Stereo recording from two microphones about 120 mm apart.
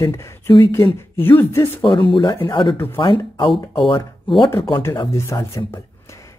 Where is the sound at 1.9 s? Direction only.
45° left (ahead or behind).